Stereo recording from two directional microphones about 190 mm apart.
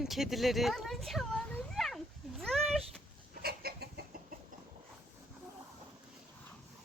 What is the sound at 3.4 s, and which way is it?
Chicken, 55° right (ahead or behind).